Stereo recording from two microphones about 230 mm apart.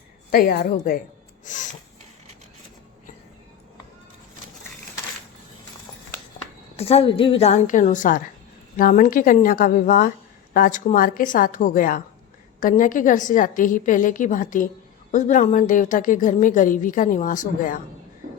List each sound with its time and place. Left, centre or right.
0.3 s a woman's voice: left
1.5 s snort: left
6.7 s a woman's voice: left